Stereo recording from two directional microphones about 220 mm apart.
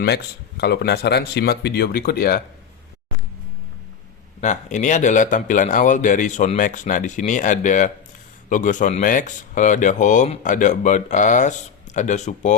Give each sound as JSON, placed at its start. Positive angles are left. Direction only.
{"t": 0.0, "sound": "speech", "side_deg": 50}
{"t": 4.4, "sound": "speech", "side_deg": 35}